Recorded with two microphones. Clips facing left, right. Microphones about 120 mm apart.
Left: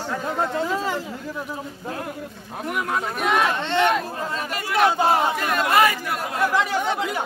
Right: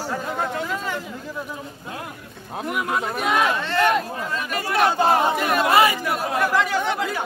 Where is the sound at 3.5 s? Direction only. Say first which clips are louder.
Left 1 dB; 25° left (ahead or behind).